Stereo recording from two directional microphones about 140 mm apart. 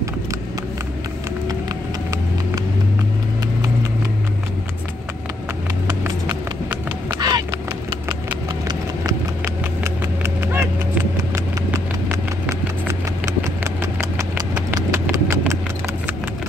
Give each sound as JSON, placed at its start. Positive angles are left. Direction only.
{"t": 7.2, "sound": "a sound", "side_deg": -30}
{"t": 8.6, "sound": "clip-clop", "side_deg": -25}
{"t": 10.5, "sound": "vehicle", "side_deg": -15}
{"t": 14.1, "sound": "clip-clop", "side_deg": -25}